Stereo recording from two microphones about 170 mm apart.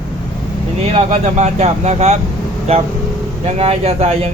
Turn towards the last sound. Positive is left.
turn(degrees=-40)  # may be behind; listen again after turning